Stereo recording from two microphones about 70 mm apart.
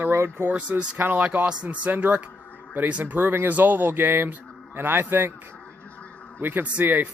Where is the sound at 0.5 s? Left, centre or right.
Centre.